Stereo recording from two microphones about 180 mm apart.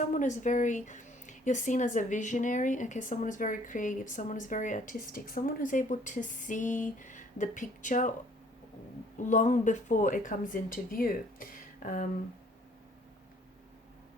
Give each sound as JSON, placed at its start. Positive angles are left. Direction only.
{"t": 0.0, "sound": "a woman's voice", "side_deg": 45}
{"t": 9.2, "sound": "a woman's voice", "side_deg": 45}